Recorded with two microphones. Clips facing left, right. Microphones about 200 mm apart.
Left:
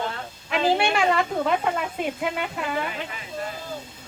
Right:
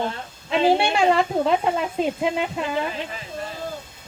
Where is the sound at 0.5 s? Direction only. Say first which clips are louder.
Right 3 dB; 25° right (ahead or behind).